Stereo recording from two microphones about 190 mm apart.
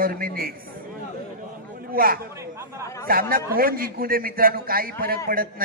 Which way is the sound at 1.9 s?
50° right (ahead or behind).